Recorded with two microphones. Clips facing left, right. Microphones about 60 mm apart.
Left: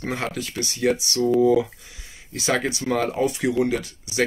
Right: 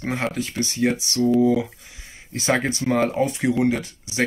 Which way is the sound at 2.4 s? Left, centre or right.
Right.